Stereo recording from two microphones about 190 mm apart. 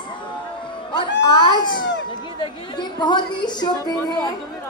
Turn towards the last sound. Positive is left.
turn(degrees=25)  # may be behind; listen again after turning